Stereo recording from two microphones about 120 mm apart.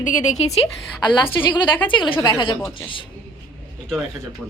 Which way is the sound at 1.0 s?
40° left (ahead or behind).